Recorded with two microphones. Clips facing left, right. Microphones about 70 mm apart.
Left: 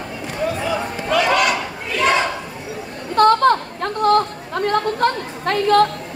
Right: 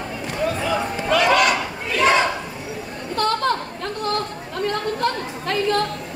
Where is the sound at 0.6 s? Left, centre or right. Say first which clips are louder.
Even; centre.